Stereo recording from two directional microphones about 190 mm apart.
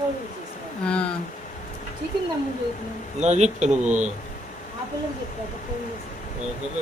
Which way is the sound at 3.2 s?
35° right (ahead or behind).